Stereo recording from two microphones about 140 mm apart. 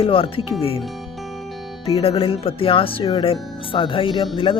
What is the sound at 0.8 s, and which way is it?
Music, centre (ahead or behind).